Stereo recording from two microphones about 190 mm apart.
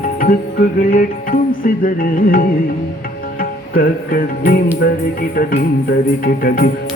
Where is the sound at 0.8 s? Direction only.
45° left (ahead or behind).